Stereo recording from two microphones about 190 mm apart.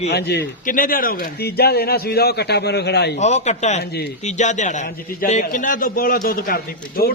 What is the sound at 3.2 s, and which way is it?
A man's voice, 35° left (ahead or behind).